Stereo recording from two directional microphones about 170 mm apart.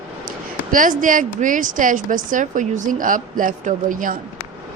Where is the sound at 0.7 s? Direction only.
50° right (ahead or behind).